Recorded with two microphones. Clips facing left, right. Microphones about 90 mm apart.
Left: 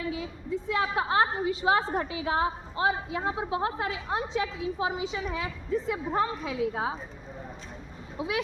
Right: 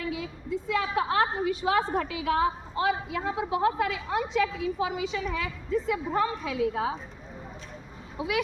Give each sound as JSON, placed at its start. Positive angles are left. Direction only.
{"t": 0.1, "sound": "a woman's voice", "side_deg": 30}